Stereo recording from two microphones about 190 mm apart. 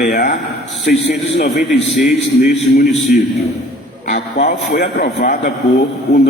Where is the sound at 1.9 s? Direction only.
Centre (ahead or behind).